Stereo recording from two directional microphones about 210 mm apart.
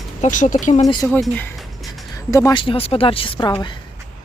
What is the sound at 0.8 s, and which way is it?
Speech, 15° left (ahead or behind).